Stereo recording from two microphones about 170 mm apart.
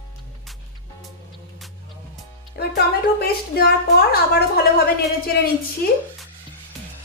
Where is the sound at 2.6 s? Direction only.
65° left (ahead or behind).